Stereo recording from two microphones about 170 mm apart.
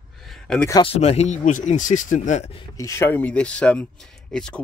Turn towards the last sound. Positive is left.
turn(degrees=5)  # may be behind; listen again after turning